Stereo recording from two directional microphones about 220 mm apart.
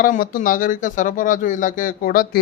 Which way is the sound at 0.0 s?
40° left (ahead or behind).